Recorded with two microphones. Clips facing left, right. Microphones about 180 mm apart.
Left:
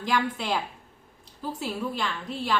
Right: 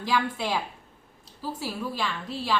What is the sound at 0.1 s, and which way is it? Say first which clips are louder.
A woman's voice: even; 10° right (ahead or behind).